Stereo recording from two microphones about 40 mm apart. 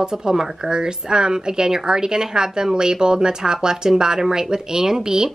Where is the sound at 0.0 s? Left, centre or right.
Centre.